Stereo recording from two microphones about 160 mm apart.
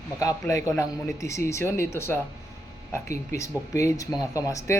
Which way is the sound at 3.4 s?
20° left (ahead or behind).